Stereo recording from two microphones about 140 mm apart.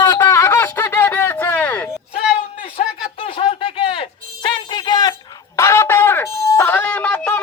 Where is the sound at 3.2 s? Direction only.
40° left (ahead or behind).